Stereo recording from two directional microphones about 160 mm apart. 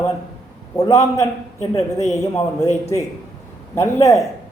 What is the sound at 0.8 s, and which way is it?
A man's voice, 20° left (ahead or behind).